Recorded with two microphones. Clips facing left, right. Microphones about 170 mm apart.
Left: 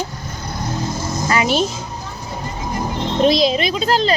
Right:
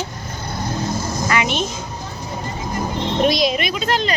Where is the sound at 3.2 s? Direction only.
30° left (ahead or behind).